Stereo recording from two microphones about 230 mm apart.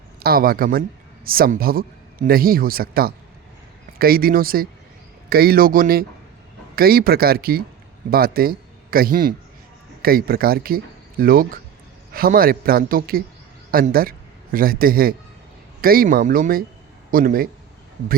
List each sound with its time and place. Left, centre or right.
0.2 s a man's voice: right